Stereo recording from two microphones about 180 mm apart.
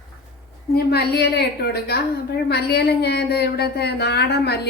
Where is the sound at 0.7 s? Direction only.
60° left (ahead or behind).